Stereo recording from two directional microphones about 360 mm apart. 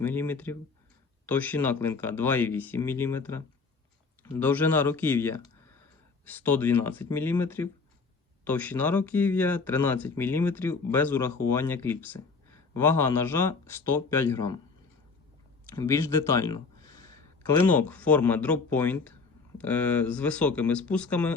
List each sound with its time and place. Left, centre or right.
0.0 s speech: centre
15.7 s speech: centre